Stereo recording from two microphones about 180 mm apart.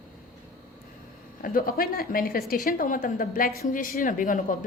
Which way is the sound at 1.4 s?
55° left (ahead or behind).